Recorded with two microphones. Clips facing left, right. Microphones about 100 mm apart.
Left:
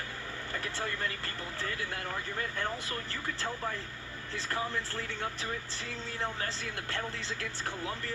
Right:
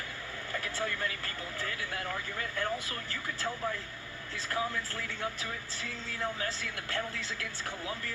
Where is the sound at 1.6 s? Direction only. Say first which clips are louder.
Left 1 dB; 30° left (ahead or behind).